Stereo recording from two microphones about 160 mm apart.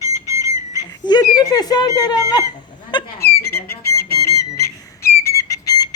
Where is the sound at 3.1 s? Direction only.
75° left (ahead or behind).